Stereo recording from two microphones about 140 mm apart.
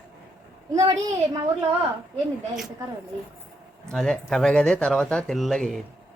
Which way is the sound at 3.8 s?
5° left (ahead or behind).